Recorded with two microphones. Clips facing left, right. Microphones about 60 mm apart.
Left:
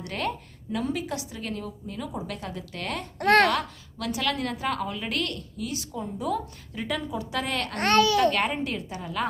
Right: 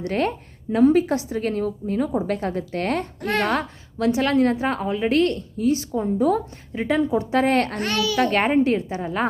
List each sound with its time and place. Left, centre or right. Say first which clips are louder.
0.0 s a woman's voice: right 7 dB; right
3.2 s a child's voice: left 8 dB; left
3.9 s a woman's voice: right 9 dB; right
7.8 s a child's voice: left 3 dB; left
8.2 s a woman's voice: right 5 dB; right